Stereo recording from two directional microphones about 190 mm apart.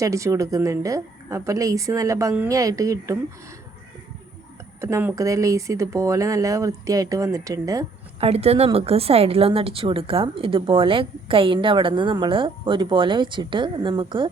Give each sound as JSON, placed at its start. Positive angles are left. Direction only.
{"t": 0.0, "sound": "a woman's voice", "side_deg": -15}
{"t": 4.8, "sound": "a woman's voice", "side_deg": -15}
{"t": 8.2, "sound": "a woman's voice", "side_deg": -35}